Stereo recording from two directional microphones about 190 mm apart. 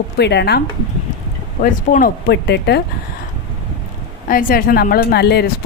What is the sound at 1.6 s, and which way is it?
Speech, 45° left (ahead or behind).